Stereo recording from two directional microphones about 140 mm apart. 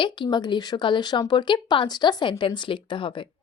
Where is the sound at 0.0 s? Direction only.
35° left (ahead or behind).